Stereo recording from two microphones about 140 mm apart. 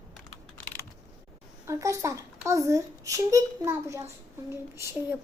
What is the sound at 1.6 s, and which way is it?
A child's voice, 20° right (ahead or behind).